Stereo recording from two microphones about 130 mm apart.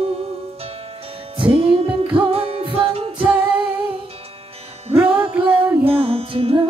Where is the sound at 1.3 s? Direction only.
40° right (ahead or behind).